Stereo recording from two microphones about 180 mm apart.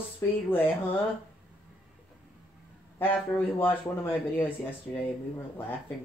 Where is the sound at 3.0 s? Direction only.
10° left (ahead or behind).